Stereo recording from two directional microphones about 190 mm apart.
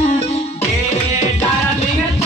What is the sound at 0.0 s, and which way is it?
Music, 35° left (ahead or behind).